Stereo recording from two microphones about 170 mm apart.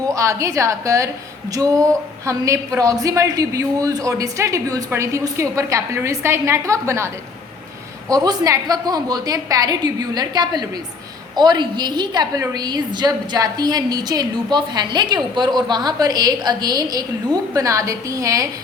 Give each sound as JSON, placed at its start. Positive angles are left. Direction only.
{"t": 0.0, "sound": "a woman's voice", "side_deg": -20}
{"t": 8.1, "sound": "a woman's voice", "side_deg": -20}